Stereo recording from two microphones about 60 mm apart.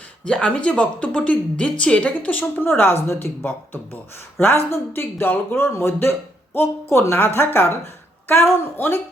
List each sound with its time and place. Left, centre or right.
0.3 s a woman's voice: centre
2.6 s speech: left